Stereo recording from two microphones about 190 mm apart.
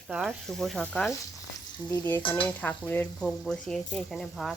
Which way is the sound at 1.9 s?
15° left (ahead or behind).